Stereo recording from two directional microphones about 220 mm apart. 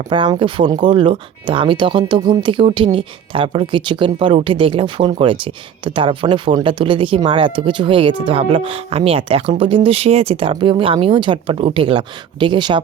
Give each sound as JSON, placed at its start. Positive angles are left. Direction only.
{"t": 0.1, "sound": "speech", "side_deg": -20}